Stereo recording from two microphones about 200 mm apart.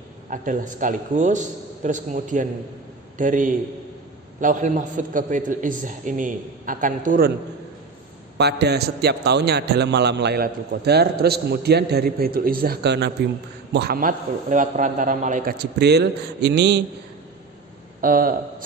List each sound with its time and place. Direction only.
0.3 s a man's voice: 40° right (ahead or behind)
8.4 s a man's voice: 55° right (ahead or behind); by 15.5 s 40° right (ahead or behind)
15.5 s a man's voice: 55° right (ahead or behind)
18.0 s speech: 45° right (ahead or behind)